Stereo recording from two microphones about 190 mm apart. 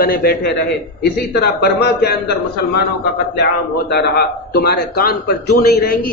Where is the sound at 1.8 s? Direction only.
60° left (ahead or behind).